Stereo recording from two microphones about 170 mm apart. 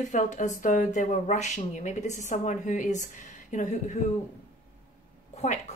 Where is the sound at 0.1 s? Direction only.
45° left (ahead or behind).